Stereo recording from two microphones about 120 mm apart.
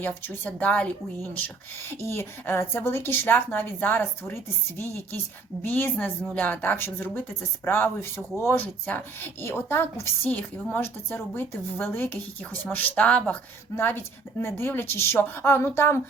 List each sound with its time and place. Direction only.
0.0 s speech: 15° left (ahead or behind)
5.6 s speech: 15° left (ahead or behind)